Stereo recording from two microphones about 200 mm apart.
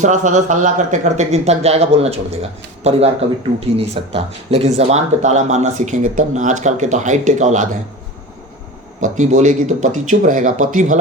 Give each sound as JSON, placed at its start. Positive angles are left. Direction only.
{"t": 0.0, "sound": "speech", "side_deg": -35}
{"t": 9.0, "sound": "speech", "side_deg": -35}